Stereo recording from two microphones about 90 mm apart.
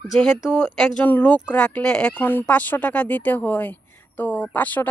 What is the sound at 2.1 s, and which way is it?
Speech, 20° left (ahead or behind).